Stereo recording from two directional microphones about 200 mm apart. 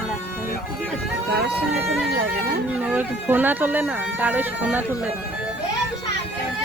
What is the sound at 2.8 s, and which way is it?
Speech, 10° right (ahead or behind).